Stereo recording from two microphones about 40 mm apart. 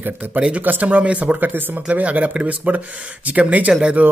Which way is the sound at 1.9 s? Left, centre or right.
Right.